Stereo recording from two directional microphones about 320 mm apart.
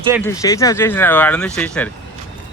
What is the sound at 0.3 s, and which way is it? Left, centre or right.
Speech, centre.